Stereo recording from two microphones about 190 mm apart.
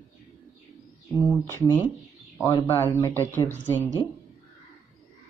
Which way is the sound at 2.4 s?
20° left (ahead or behind).